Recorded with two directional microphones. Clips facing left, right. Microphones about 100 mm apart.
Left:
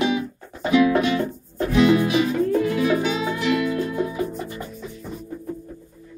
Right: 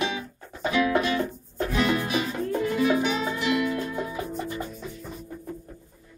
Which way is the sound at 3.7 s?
Centre (ahead or behind).